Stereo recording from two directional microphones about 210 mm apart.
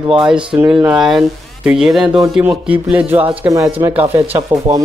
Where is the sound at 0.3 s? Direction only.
5° right (ahead or behind).